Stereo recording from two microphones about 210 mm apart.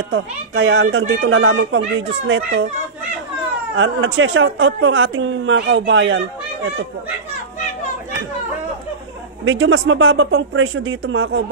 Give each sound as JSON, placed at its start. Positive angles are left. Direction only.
{"t": 0.1, "sound": "speech", "side_deg": -60}
{"t": 3.7, "sound": "speech", "side_deg": -65}
{"t": 9.4, "sound": "speech", "side_deg": -65}